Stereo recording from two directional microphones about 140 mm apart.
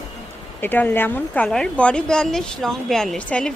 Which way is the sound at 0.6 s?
15° left (ahead or behind).